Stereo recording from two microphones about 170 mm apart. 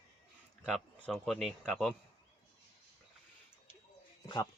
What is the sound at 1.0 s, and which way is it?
Speech, 5° left (ahead or behind).